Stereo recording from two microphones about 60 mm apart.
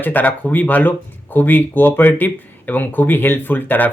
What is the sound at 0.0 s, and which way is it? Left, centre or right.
Speech, left.